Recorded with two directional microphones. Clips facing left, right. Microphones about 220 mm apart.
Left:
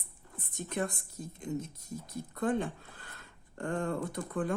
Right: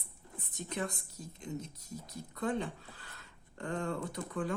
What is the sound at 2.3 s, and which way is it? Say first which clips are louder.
Speech: left 3 dB; 50° left (ahead or behind).